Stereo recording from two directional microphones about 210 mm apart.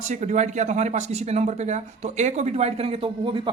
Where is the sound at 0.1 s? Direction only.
35° right (ahead or behind).